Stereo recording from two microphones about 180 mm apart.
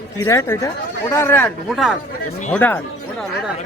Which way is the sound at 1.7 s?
Centre (ahead or behind).